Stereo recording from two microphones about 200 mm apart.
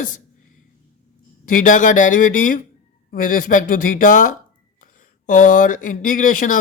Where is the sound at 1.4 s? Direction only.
40° left (ahead or behind).